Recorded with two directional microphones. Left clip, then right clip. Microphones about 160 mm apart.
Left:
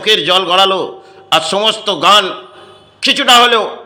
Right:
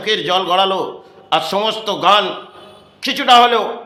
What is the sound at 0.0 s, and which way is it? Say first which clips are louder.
A man's voice: left 5 dB; 15° left (ahead or behind).